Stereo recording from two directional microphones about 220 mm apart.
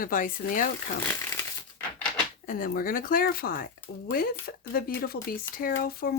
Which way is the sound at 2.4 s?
40° left (ahead or behind).